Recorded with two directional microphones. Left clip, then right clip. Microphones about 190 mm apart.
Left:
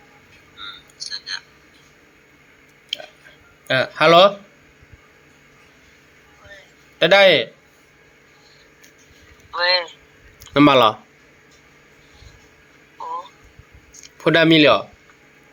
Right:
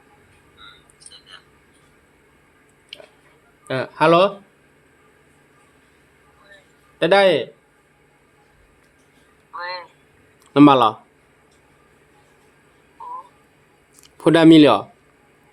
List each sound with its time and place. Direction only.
2.9 s a sound: 15° right (ahead or behind)
3.7 s speech: 10° right (ahead or behind)
7.0 s speech: 10° right (ahead or behind)
9.5 s a sound: 25° left (ahead or behind)
10.4 s speech: centre (ahead or behind)
14.0 s speech: 20° right (ahead or behind)